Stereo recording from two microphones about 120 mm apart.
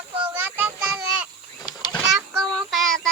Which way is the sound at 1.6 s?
35° left (ahead or behind).